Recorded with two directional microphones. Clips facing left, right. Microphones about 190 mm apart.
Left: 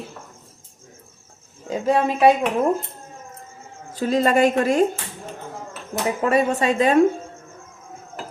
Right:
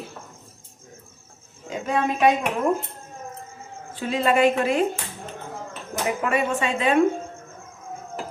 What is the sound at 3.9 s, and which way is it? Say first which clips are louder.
Speech: left 3 dB; 40° left (ahead or behind).